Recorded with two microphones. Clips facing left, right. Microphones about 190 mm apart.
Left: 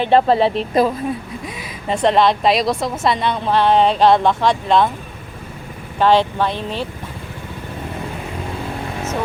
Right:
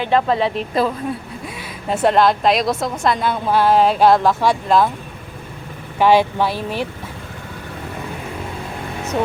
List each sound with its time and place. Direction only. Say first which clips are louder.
0.0 s speech: left 3 dB; 30° left (ahead or behind)
1.9 s a woman's voice: even; 5° right (ahead or behind)
6.0 s speech: right 1 dB; 10° right (ahead or behind)